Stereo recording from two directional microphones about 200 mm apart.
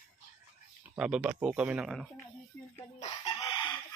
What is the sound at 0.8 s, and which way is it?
Speech, 5° right (ahead or behind).